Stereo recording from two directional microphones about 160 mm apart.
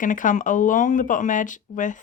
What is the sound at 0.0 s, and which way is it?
Speech, 55° left (ahead or behind).